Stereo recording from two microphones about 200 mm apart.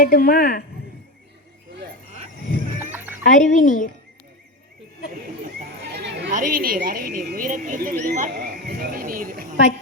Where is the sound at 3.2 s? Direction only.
40° left (ahead or behind).